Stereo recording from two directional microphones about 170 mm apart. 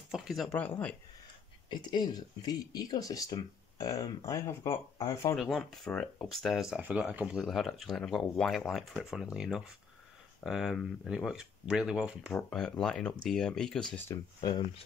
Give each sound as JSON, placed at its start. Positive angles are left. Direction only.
{"t": 0.1, "sound": "speech", "side_deg": 0}
{"t": 1.7, "sound": "speech", "side_deg": 25}
{"t": 5.3, "sound": "speech", "side_deg": 0}
{"t": 14.1, "sound": "speech", "side_deg": 25}